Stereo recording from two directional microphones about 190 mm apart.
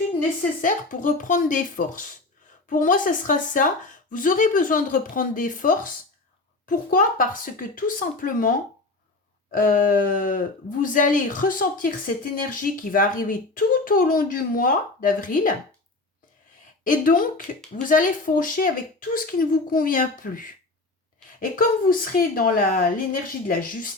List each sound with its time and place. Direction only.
0.6 s speech: 45° left (ahead or behind)
16.8 s speech: 45° left (ahead or behind)
21.5 s speech: 50° left (ahead or behind)